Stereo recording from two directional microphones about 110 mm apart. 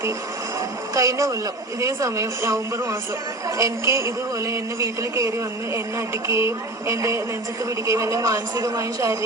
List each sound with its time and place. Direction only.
0.9 s a woman's voice: 30° right (ahead or behind)